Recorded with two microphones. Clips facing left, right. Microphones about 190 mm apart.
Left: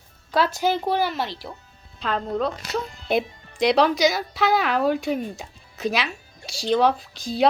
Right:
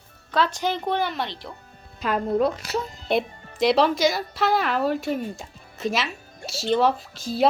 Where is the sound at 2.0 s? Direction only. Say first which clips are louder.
Right 3 dB; 10° right (ahead or behind).